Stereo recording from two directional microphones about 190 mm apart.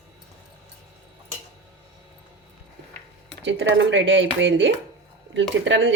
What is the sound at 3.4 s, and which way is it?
Speech, 75° right (ahead or behind).